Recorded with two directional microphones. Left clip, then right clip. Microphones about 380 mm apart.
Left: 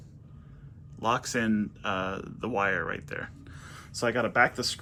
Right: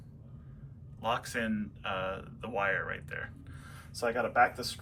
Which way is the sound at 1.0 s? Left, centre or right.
Centre.